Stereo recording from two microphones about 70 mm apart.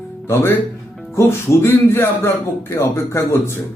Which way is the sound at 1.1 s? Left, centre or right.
Left.